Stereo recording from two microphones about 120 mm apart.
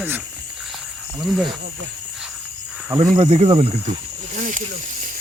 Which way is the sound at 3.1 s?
55° right (ahead or behind).